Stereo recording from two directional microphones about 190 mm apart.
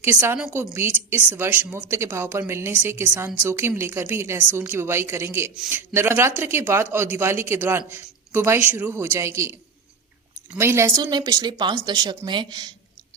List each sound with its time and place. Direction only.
0.0 s a woman's voice: 10° right (ahead or behind)